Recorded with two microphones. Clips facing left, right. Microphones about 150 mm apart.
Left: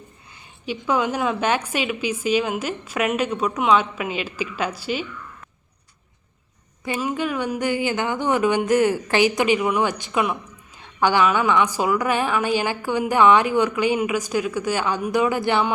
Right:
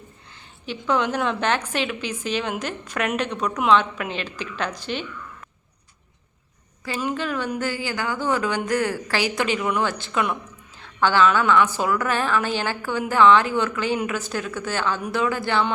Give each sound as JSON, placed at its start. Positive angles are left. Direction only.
{"t": 0.3, "sound": "a woman's voice", "side_deg": 10}
{"t": 7.0, "sound": "a woman's voice", "side_deg": 10}